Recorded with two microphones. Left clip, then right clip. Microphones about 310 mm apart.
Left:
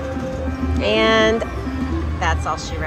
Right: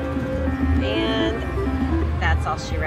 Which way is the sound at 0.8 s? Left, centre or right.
Left.